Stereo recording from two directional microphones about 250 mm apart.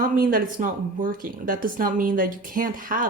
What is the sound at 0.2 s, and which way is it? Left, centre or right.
Speech, right.